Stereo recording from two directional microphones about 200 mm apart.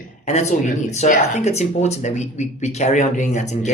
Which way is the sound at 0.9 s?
35° left (ahead or behind).